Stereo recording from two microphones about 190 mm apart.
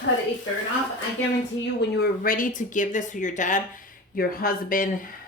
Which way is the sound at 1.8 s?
60° left (ahead or behind).